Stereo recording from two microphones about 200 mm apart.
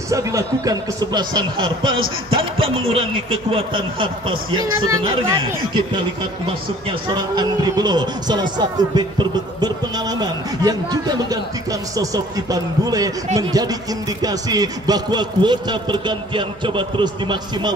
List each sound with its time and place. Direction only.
0.1 s a man's voice: 15° right (ahead or behind)